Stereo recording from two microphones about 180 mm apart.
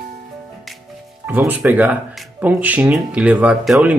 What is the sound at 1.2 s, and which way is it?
Speech, 10° right (ahead or behind).